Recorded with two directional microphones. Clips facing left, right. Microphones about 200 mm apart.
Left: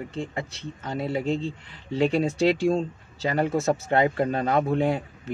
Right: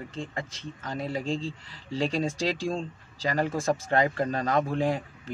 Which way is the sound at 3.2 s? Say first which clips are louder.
Left 3 dB; 30° left (ahead or behind).